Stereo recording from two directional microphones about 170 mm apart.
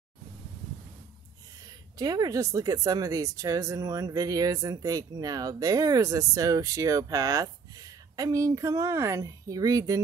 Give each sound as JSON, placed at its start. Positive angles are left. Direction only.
{"t": 2.0, "sound": "a woman's voice", "side_deg": -25}